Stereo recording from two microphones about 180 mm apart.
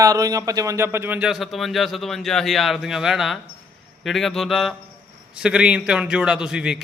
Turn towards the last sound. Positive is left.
turn(degrees=-5)  # may be behind; listen again after turning